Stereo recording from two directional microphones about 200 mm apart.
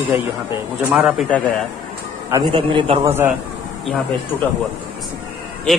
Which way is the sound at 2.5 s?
30° right (ahead or behind).